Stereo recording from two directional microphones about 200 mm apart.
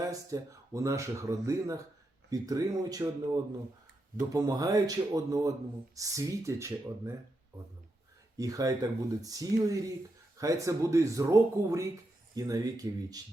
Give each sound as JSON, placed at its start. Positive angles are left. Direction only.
{"t": 0.0, "sound": "speech", "side_deg": -15}
{"t": 8.4, "sound": "speech", "side_deg": -15}